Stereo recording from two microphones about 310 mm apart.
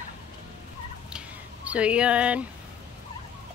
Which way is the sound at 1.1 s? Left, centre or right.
Centre.